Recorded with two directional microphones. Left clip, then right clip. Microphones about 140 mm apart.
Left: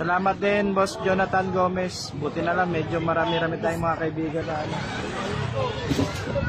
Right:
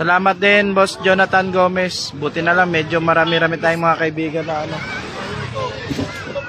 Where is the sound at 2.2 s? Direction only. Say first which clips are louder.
Right 6 dB; 25° right (ahead or behind).